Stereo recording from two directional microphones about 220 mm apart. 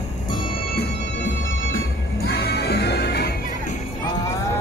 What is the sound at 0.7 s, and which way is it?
Music, 50° left (ahead or behind).